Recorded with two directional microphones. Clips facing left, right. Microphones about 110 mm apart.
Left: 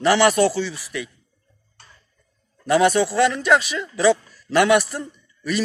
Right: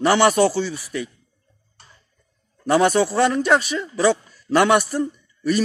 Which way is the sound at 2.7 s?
40° right (ahead or behind).